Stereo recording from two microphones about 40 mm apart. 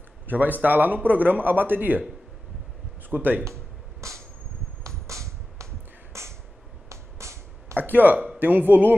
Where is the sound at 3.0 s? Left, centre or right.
Right.